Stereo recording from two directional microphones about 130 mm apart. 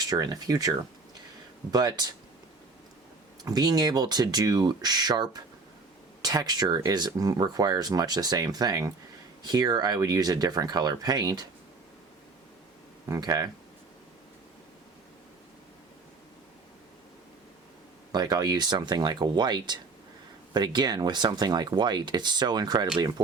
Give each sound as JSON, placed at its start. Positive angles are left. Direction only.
{"t": 0.0, "sound": "speech", "side_deg": -30}
{"t": 1.7, "sound": "speech", "side_deg": -30}
{"t": 3.4, "sound": "speech", "side_deg": -30}
{"t": 13.1, "sound": "speech", "side_deg": -30}
{"t": 18.1, "sound": "speech", "side_deg": -30}